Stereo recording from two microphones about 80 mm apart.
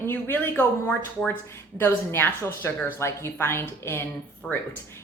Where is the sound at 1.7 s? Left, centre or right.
Left.